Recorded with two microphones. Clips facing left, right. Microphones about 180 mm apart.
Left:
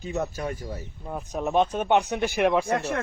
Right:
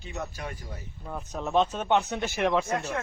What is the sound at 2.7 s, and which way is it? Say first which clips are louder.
Speech: left 4 dB; 75° left (ahead or behind).